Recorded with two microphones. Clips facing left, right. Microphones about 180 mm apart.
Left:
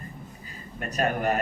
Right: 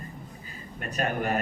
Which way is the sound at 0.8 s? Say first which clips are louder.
Left 2 dB; 40° left (ahead or behind).